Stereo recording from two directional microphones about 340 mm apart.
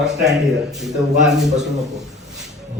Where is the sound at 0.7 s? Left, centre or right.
Centre.